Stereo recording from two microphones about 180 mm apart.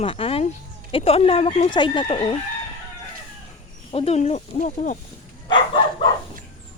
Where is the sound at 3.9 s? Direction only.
35° left (ahead or behind).